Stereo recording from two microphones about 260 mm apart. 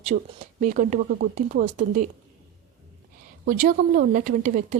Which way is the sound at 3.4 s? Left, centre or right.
Right.